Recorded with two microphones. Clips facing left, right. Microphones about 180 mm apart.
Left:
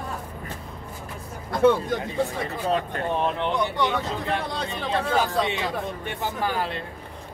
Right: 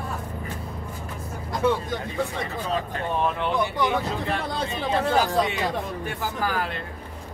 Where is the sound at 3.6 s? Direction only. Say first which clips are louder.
Even; 5° right (ahead or behind).